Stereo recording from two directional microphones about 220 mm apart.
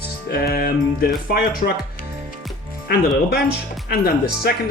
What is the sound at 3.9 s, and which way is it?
Speech, 45° left (ahead or behind).